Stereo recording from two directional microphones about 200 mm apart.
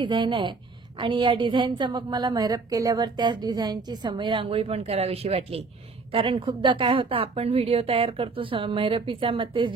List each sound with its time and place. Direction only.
0.0 s a woman's voice: 25° right (ahead or behind)